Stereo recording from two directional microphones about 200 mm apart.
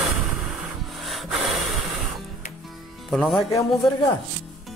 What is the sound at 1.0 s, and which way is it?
Rub, centre (ahead or behind).